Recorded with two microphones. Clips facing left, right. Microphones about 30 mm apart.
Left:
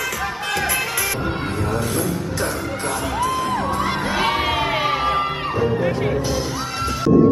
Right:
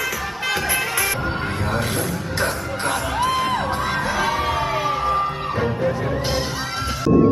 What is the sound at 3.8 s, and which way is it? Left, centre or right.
Music, left.